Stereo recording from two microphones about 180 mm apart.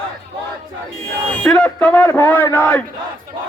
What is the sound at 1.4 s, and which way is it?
A man's voice, 5° left (ahead or behind).